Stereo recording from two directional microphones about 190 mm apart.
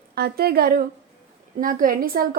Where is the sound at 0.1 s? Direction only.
55° right (ahead or behind).